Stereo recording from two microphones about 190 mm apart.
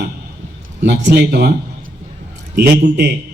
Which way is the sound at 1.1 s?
55° right (ahead or behind).